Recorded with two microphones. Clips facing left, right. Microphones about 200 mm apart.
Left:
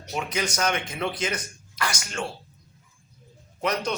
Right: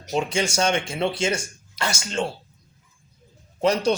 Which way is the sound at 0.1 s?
25° right (ahead or behind).